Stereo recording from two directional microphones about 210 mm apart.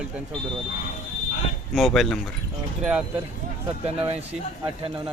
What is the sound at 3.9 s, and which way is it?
Speech, 25° right (ahead or behind).